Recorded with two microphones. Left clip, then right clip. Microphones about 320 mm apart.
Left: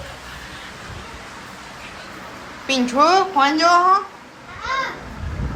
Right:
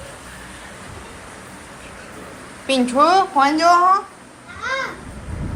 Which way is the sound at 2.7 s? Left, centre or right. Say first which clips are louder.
Right 1 dB; centre.